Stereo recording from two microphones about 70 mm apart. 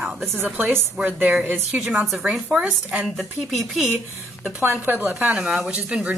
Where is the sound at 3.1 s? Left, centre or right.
Centre.